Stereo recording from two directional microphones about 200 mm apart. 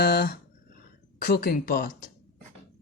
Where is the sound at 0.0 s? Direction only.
50° left (ahead or behind).